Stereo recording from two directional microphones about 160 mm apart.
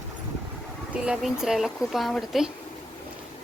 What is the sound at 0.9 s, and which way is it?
Speech, 5° right (ahead or behind).